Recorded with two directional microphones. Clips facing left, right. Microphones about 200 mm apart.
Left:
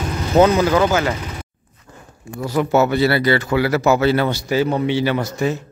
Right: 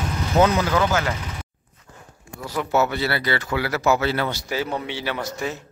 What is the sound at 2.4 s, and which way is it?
Speech, 35° left (ahead or behind).